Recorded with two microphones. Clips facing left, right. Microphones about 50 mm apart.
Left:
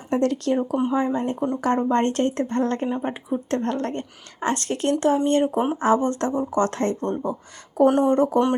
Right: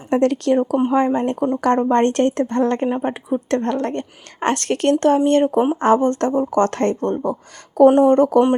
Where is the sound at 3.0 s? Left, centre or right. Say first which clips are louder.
Right 5 dB; right.